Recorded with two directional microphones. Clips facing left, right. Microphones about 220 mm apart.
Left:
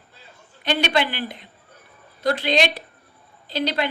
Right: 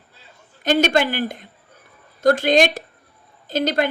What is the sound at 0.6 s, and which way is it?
Speech, 45° right (ahead or behind).